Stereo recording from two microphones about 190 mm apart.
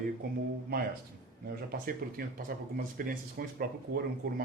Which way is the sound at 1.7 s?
50° right (ahead or behind).